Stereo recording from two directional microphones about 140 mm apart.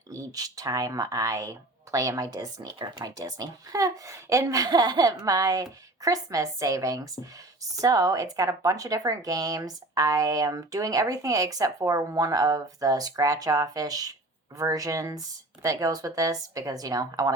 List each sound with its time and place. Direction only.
0.1 s speech: 25° right (ahead or behind)